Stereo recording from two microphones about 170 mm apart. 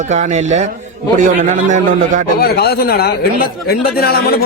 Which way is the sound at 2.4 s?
70° left (ahead or behind).